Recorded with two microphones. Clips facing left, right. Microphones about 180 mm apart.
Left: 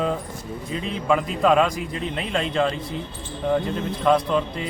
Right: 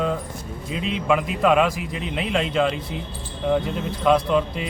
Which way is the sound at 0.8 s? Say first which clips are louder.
Right 6 dB; 90° right.